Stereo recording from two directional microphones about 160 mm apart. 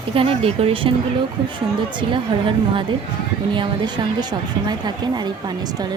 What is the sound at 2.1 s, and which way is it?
A woman's voice, 30° right (ahead or behind).